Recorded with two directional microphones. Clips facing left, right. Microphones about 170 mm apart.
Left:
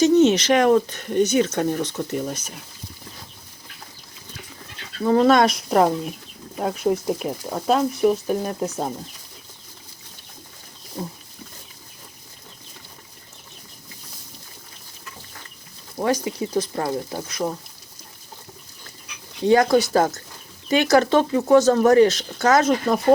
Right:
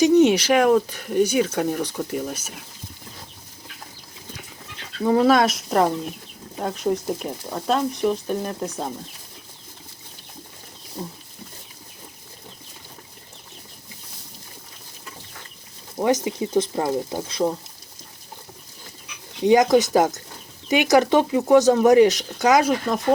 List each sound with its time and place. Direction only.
0.0 s speech: 15° right (ahead or behind)
5.0 s speech: 5° right (ahead or behind)
16.0 s speech: 20° right (ahead or behind)
19.5 s speech: 15° right (ahead or behind)